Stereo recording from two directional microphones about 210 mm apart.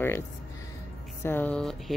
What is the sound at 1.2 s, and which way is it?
Speech, 10° left (ahead or behind).